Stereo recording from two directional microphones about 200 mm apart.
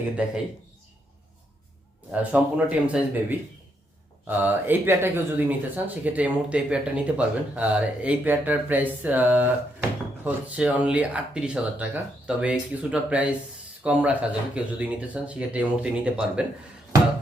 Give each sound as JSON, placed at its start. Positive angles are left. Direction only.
{"t": 0.2, "sound": "speech", "side_deg": -5}
{"t": 2.1, "sound": "speech", "side_deg": -5}